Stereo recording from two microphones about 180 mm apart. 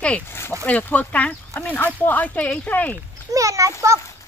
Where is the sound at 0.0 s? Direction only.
10° left (ahead or behind).